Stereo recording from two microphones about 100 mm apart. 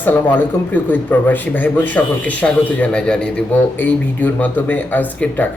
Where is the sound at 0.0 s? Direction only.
20° left (ahead or behind).